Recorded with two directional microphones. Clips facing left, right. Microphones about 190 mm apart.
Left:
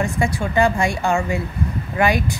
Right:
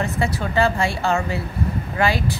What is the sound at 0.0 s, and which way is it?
Speech, 15° left (ahead or behind).